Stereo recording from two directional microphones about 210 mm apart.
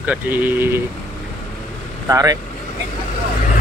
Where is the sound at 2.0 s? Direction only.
15° right (ahead or behind).